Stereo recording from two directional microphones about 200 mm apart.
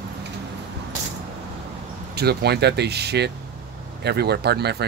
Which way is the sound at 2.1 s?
55° right (ahead or behind).